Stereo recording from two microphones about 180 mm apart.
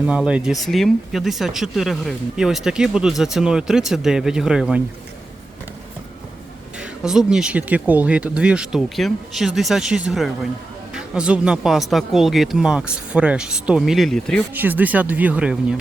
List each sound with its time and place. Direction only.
0.0 s speech: 5° right (ahead or behind)
6.7 s speech: 5° right (ahead or behind)
14.5 s speech: 10° right (ahead or behind)